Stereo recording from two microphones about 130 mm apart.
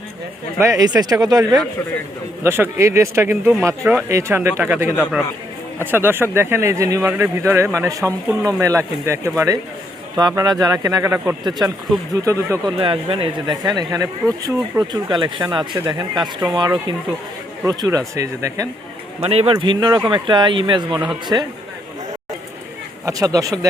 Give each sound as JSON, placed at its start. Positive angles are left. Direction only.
{"t": 0.6, "sound": "speech", "side_deg": -25}
{"t": 11.4, "sound": "speech", "side_deg": -30}
{"t": 12.8, "sound": "speech", "side_deg": -45}
{"t": 13.7, "sound": "speech", "side_deg": -30}
{"t": 17.7, "sound": "speech", "side_deg": -30}
{"t": 19.2, "sound": "speech", "side_deg": -50}
{"t": 19.5, "sound": "speech", "side_deg": -35}
{"t": 23.0, "sound": "speech", "side_deg": -25}